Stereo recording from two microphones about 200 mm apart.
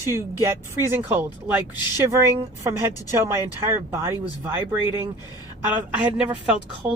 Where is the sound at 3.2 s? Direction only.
15° right (ahead or behind).